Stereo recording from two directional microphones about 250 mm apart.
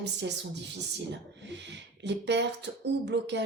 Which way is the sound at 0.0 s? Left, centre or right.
Right.